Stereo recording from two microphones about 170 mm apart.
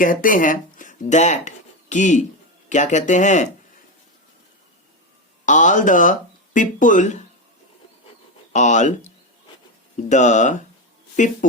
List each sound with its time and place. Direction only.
0.0 s speech: 50° left (ahead or behind)
5.5 s speech: 50° left (ahead or behind)
8.5 s speech: 45° left (ahead or behind)